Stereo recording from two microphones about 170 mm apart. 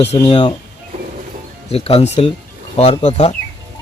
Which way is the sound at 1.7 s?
35° left (ahead or behind).